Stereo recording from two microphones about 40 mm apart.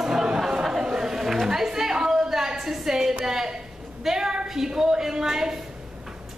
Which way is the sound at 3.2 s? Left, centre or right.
Centre.